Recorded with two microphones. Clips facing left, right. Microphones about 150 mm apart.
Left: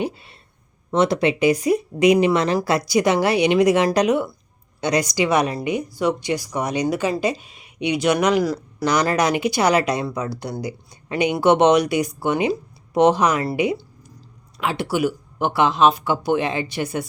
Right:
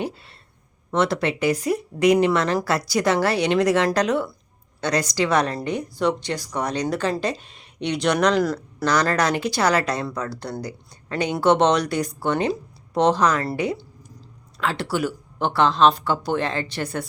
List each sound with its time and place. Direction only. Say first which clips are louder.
0.0 s speech: left 3 dB; 15° left (ahead or behind)